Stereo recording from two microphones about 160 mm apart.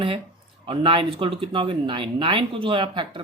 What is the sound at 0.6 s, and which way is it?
Speech, 35° right (ahead or behind).